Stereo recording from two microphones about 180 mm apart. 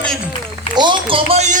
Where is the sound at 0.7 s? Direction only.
25° right (ahead or behind).